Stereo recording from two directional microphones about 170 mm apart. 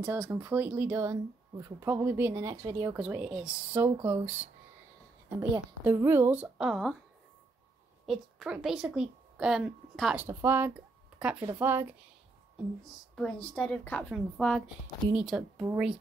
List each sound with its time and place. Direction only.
0.0 s a woman's voice: 15° right (ahead or behind)
5.4 s a woman's voice: 15° right (ahead or behind); by 7.0 s centre (ahead or behind)
8.1 s a woman's voice: centre (ahead or behind)
10.2 s a woman's voice: 10° right (ahead or behind)
13.1 s a woman's voice: 5° left (ahead or behind)